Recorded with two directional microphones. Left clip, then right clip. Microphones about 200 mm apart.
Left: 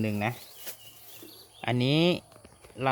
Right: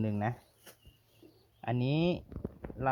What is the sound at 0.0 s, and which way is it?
Speech, centre (ahead or behind).